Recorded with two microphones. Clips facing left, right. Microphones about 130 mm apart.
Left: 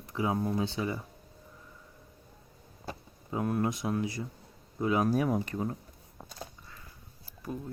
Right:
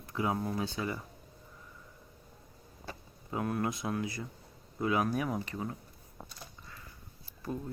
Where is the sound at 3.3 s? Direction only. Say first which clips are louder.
Left 3 dB; 20° left (ahead or behind).